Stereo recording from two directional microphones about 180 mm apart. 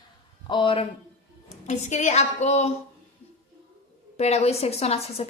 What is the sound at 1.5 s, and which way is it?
A woman's voice, 40° left (ahead or behind).